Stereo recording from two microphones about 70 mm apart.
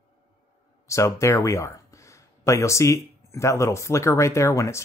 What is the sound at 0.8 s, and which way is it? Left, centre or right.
Speech, left.